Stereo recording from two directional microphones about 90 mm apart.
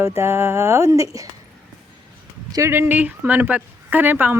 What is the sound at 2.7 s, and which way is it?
Speech, 25° right (ahead or behind).